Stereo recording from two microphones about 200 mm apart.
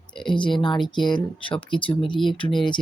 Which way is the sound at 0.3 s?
25° left (ahead or behind).